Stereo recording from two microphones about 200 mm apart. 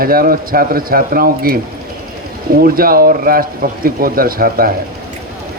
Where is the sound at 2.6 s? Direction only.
45° right (ahead or behind).